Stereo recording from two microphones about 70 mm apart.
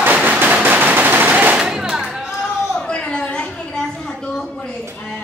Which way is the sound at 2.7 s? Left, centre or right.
Centre.